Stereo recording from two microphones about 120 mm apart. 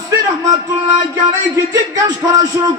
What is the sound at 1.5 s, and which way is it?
Speech, 30° right (ahead or behind).